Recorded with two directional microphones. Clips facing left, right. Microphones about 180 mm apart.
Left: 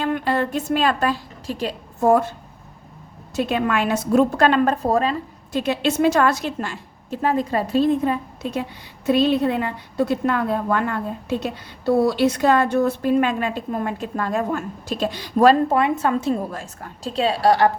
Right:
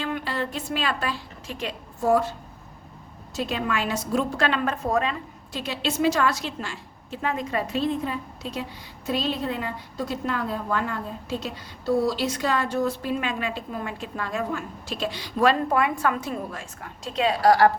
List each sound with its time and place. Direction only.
0.0 s a woman's voice: 50° left (ahead or behind)
2.0 s a woman's voice: 55° left (ahead or behind)
3.3 s a woman's voice: 60° left (ahead or behind); by 5.1 s 35° left (ahead or behind)
5.5 s a woman's voice: 55° left (ahead or behind)
15.7 s a woman's voice: 25° left (ahead or behind)